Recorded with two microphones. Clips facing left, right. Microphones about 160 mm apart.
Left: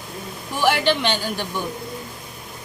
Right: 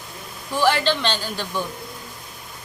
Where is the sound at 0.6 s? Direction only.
15° left (ahead or behind).